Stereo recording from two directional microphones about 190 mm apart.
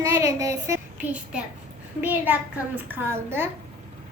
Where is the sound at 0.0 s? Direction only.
15° right (ahead or behind).